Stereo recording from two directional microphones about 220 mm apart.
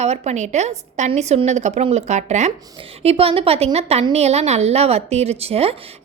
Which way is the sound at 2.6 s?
20° right (ahead or behind).